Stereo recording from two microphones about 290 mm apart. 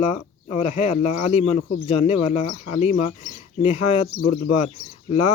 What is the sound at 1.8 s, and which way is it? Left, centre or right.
Speech, left.